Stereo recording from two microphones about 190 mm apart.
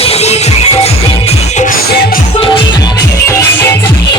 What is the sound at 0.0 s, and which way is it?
Music, 35° left (ahead or behind).